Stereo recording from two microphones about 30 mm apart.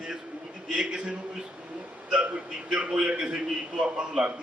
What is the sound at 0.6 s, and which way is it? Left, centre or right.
Speech, right.